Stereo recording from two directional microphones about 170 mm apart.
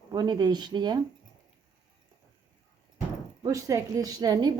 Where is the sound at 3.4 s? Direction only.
20° right (ahead or behind).